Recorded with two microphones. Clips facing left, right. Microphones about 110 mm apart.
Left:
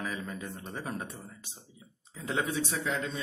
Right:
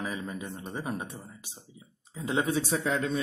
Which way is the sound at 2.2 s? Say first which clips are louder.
Right 4 dB; 25° right (ahead or behind).